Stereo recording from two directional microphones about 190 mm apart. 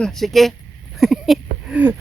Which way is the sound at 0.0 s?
Centre (ahead or behind).